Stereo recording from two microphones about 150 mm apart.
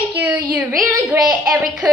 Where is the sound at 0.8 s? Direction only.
20° right (ahead or behind).